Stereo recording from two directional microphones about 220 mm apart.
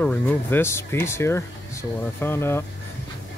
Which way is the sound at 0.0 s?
5° left (ahead or behind).